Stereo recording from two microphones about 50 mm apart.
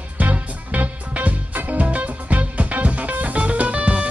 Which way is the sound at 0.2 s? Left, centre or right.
Right.